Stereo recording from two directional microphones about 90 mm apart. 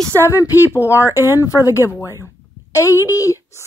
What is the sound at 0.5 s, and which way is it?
Speech, 20° right (ahead or behind).